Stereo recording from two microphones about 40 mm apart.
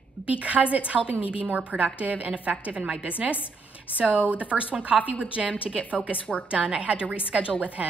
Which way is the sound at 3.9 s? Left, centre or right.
Right.